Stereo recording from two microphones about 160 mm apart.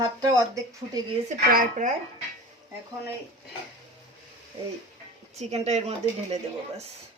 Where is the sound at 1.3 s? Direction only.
55° right (ahead or behind).